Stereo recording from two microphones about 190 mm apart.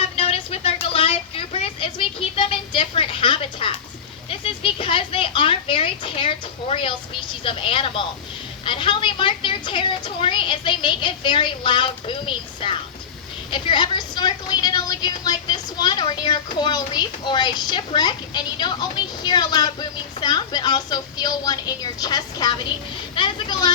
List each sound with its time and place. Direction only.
0.0 s a sound: 30° left (ahead or behind)
7.4 s a woman's voice: 25° left (ahead or behind)
23.1 s vehicle: 25° left (ahead or behind)